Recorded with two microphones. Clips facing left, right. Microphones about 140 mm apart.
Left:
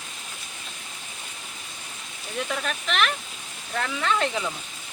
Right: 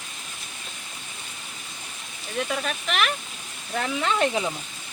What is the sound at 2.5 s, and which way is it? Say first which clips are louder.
Speech: left 2 dB; 5° right (ahead or behind).